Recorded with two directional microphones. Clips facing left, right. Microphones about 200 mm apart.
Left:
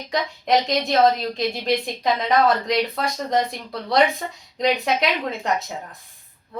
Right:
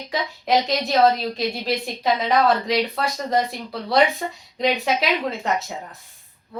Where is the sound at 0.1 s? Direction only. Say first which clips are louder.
Left 1 dB; centre (ahead or behind).